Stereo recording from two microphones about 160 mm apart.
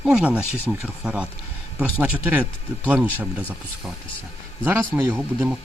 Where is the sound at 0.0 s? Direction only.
5° right (ahead or behind).